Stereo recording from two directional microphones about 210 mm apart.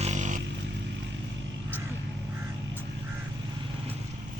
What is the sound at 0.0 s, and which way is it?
Vehicle, 35° right (ahead or behind).